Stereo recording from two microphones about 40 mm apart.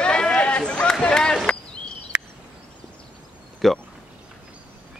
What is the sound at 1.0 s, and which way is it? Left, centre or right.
Run, centre.